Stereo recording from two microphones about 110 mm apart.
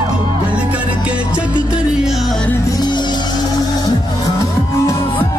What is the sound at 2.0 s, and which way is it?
Music, centre (ahead or behind).